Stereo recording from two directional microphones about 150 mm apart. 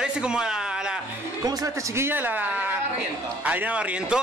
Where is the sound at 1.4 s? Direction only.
20° right (ahead or behind).